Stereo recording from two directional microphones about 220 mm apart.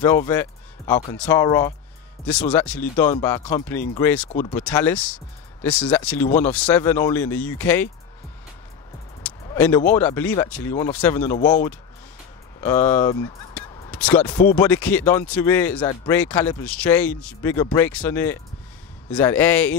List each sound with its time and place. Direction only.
0.0 s speech: 10° left (ahead or behind)
4.3 s speech: 30° left (ahead or behind)
4.7 s speech: 5° left (ahead or behind)
9.2 s speech: 10° left (ahead or behind)
12.5 s speech: 10° left (ahead or behind)
13.9 s a sound: 5° left (ahead or behind)
14.4 s speech: 10° left (ahead or behind)